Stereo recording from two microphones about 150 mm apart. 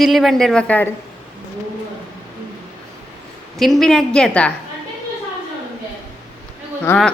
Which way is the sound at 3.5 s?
Centre (ahead or behind).